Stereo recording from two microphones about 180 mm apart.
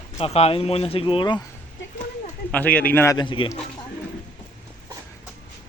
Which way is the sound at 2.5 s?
10° left (ahead or behind).